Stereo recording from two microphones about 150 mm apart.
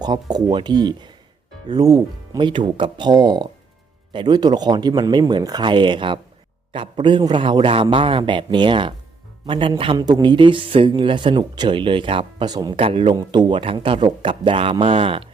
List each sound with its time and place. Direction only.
0.0 s speech: 25° right (ahead or behind)
12.8 s speech: 35° right (ahead or behind)